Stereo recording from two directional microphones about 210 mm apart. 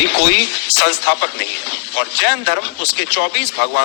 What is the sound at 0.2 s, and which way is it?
A man's voice, 55° left (ahead or behind).